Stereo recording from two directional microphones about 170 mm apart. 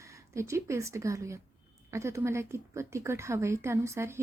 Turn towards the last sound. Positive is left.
turn(degrees=-15)  # may be behind; listen again after turning